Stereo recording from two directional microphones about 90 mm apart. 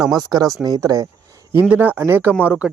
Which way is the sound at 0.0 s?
5° right (ahead or behind).